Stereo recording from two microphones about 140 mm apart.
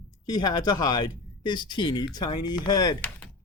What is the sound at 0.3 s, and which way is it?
Speech, 30° left (ahead or behind).